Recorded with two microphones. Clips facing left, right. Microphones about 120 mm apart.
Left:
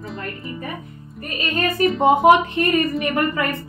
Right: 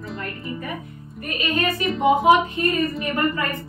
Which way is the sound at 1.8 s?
45° left (ahead or behind).